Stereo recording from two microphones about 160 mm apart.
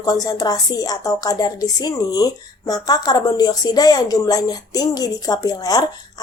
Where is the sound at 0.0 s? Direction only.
25° left (ahead or behind).